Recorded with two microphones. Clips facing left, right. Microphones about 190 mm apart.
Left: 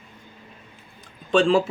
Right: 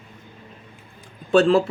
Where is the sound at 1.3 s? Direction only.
5° right (ahead or behind).